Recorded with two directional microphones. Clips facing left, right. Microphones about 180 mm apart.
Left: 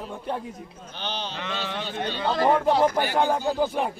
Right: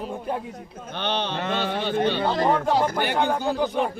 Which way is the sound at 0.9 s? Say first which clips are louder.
Right 6 dB; 60° right (ahead or behind).